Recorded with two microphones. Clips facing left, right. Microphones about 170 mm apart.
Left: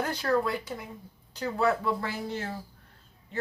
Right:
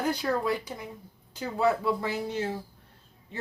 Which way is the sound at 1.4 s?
20° right (ahead or behind).